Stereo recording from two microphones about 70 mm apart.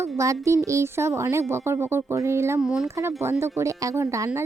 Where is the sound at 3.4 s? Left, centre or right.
Right.